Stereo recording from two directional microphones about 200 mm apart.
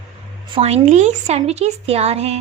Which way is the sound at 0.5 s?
30° right (ahead or behind).